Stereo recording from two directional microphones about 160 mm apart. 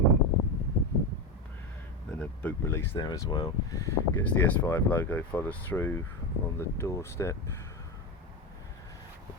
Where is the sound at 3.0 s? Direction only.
25° left (ahead or behind).